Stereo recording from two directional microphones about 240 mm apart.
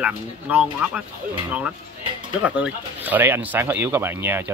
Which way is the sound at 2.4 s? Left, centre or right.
Centre.